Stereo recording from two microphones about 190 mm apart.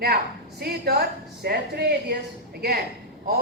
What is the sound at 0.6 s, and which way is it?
A woman's voice, 55° right (ahead or behind).